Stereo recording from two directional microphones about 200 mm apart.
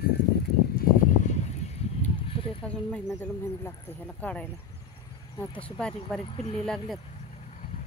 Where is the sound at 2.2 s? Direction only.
25° left (ahead or behind).